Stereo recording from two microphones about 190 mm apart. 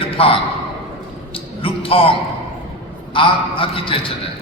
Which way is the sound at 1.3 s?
30° left (ahead or behind).